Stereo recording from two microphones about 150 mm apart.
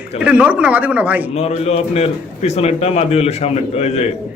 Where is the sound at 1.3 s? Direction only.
45° left (ahead or behind).